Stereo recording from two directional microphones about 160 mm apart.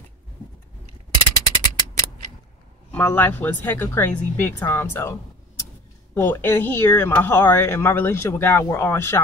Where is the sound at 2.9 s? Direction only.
10° left (ahead or behind).